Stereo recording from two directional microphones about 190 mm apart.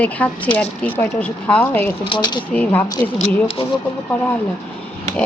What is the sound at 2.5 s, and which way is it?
Speech, 5° left (ahead or behind).